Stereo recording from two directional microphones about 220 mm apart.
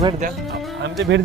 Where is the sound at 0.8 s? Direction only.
55° right (ahead or behind).